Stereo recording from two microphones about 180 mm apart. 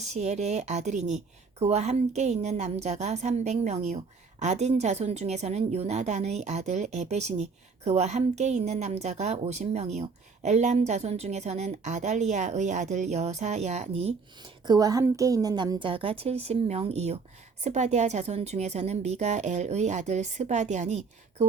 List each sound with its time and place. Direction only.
0.0 s speech: 40° right (ahead or behind)
14.6 s a woman's voice: 20° right (ahead or behind); by 21.4 s 40° right (ahead or behind)